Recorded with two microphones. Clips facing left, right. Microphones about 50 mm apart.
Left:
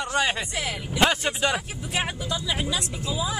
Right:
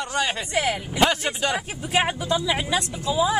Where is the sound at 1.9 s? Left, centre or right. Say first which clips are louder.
Right 6 dB; right.